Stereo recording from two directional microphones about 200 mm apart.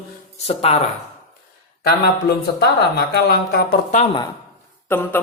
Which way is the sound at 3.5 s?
50° left (ahead or behind).